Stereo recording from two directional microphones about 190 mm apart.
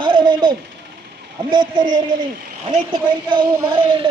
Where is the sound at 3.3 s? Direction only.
25° right (ahead or behind).